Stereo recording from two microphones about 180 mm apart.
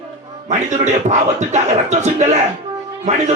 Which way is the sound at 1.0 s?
40° right (ahead or behind).